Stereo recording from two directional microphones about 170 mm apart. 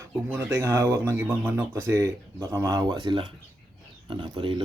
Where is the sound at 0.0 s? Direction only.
15° right (ahead or behind).